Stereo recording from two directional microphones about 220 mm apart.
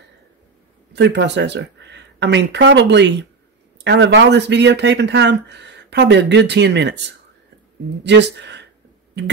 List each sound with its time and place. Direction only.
0.9 s speech: 50° right (ahead or behind)
8.0 s speech: 50° right (ahead or behind)